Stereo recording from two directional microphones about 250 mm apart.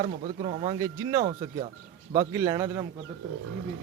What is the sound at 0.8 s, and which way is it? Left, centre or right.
Speech, centre.